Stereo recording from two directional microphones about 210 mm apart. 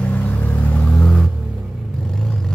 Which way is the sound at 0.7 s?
5° left (ahead or behind).